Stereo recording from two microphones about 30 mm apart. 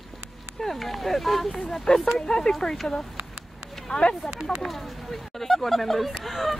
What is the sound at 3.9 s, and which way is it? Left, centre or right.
Speech, left.